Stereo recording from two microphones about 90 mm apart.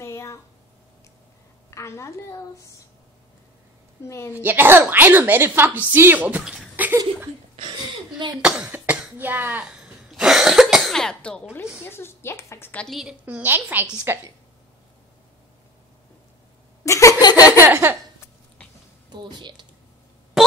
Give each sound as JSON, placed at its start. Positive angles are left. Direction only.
{"t": 0.0, "sound": "a sound", "side_deg": 30}
{"t": 1.7, "sound": "a woman's voice", "side_deg": 30}
{"t": 4.0, "sound": "a woman's voice", "side_deg": 30}
{"t": 4.3, "sound": "a woman's voice", "side_deg": -20}
{"t": 8.4, "sound": "speech", "side_deg": -10}
{"t": 8.9, "sound": "cough", "side_deg": -15}
{"t": 11.8, "sound": "a woman's voice", "side_deg": 25}
{"t": 13.2, "sound": "a woman's voice", "side_deg": -20}
{"t": 16.8, "sound": "laughter", "side_deg": 35}
{"t": 17.2, "sound": "a sound", "side_deg": 45}
{"t": 17.6, "sound": "a woman's voice", "side_deg": -25}
{"t": 19.1, "sound": "speech", "side_deg": -55}
{"t": 20.4, "sound": "music", "side_deg": -5}